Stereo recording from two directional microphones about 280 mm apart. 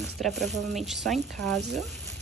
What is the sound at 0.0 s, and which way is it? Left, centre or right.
Speech, centre.